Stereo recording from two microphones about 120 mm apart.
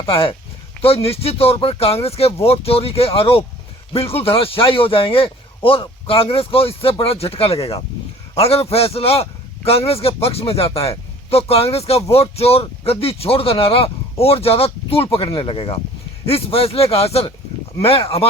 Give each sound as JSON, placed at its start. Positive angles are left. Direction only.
{"t": 0.1, "sound": "speech", "side_deg": 45}